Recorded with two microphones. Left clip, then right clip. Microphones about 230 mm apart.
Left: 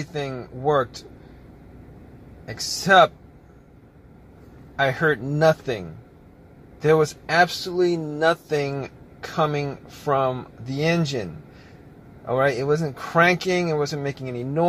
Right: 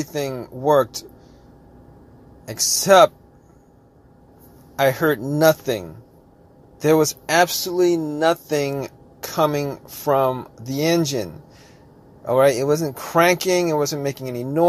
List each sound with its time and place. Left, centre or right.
0.0 s speech: right
2.4 s speech: right
4.7 s speech: right
12.3 s speech: right